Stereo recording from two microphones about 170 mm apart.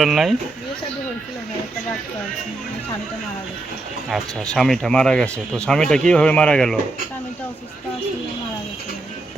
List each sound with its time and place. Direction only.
0.0 s speech: centre (ahead or behind)
4.5 s speech: centre (ahead or behind)